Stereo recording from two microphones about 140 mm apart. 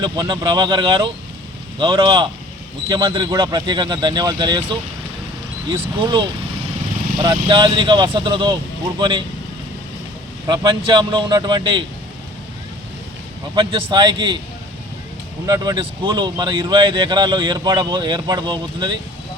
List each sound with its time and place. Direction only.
0.0 s speech: 30° right (ahead or behind)
6.0 s speech: 35° right (ahead or behind)
7.4 s speech: 35° right (ahead or behind)
10.5 s speech: 35° right (ahead or behind)
13.6 s speech: 35° right (ahead or behind)
15.4 s speech: 30° right (ahead or behind)